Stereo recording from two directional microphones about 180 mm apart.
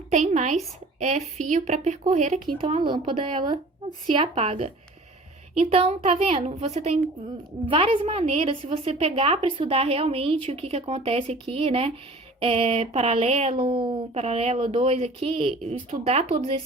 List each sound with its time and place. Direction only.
0.1 s a woman's voice: 40° right (ahead or behind)